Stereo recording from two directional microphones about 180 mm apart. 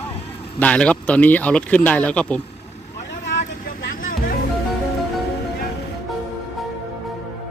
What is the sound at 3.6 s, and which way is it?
Vehicle, 50° left (ahead or behind).